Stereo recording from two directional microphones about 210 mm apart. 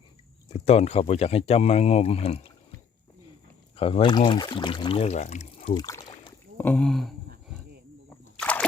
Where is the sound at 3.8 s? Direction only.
25° left (ahead or behind).